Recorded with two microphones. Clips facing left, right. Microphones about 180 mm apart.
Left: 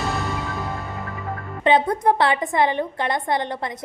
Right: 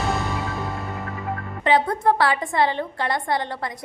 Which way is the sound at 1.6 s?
20° left (ahead or behind).